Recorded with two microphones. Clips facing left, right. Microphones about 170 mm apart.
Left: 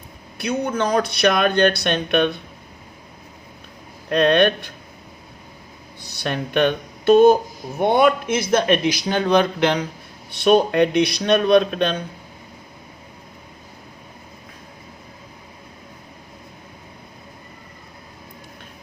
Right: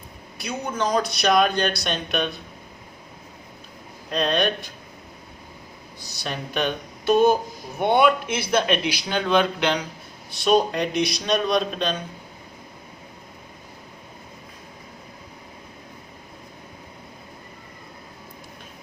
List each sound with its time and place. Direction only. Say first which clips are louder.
0.3 s speech: left 6 dB; 60° left (ahead or behind)
4.1 s speech: left 7 dB; 60° left (ahead or behind)
6.2 s a man's voice: left 7 dB; 60° left (ahead or behind)
10.4 s speech: left 5 dB; 60° left (ahead or behind)